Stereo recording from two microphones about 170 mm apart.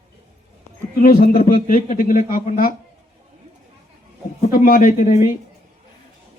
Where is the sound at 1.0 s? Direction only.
55° left (ahead or behind).